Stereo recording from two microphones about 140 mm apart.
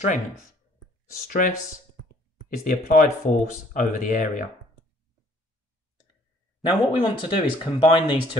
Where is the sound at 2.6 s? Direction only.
70° left (ahead or behind).